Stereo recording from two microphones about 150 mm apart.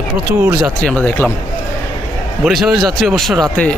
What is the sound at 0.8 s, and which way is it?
Speech, 10° left (ahead or behind).